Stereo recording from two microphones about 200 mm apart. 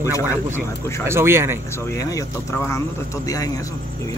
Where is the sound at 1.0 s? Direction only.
10° right (ahead or behind).